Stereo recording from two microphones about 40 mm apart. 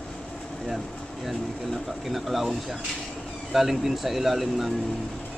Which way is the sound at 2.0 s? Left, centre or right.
Centre.